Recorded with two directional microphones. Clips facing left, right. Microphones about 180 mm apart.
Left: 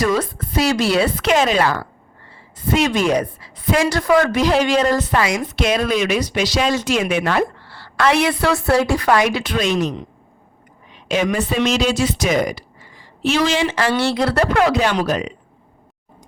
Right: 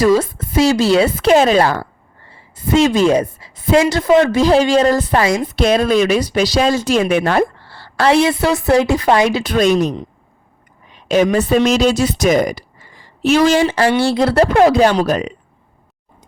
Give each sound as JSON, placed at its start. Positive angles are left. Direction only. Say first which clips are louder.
{"t": 0.0, "sound": "a woman's voice", "louder": "right 6 dB", "side_deg": -25}
{"t": 9.5, "sound": "a woman's voice", "louder": "right 6 dB", "side_deg": -40}
{"t": 11.1, "sound": "a woman's voice", "louder": "right 6 dB", "side_deg": -40}